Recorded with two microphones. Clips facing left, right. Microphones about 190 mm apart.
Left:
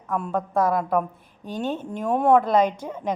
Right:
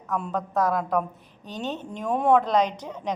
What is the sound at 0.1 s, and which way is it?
A woman's voice, 5° left (ahead or behind).